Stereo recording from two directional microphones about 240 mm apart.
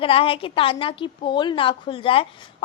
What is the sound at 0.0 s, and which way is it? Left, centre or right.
A woman's voice, left.